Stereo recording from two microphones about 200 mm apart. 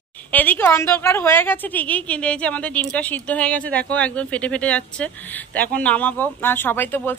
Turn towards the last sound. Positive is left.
turn(degrees=10)  # may be behind; listen again after turning